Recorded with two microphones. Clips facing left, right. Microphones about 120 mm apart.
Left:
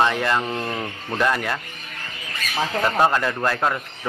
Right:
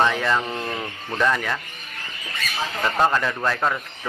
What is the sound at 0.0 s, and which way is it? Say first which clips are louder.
Speech: left 1 dB; 5° left (ahead or behind).